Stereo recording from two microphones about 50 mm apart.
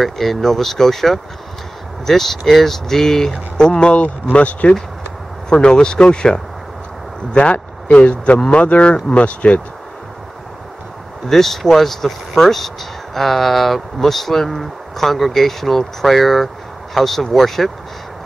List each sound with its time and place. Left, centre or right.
0.0 s speech: centre; by 4.7 s left
5.5 s speech: centre
11.2 s speech: centre